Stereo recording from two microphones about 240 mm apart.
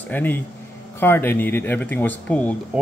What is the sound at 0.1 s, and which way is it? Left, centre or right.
Speech, centre.